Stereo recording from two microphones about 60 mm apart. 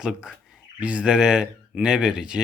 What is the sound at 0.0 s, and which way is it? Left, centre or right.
Speech, centre.